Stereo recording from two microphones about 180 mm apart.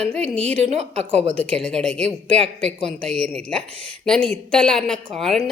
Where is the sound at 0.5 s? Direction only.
35° right (ahead or behind).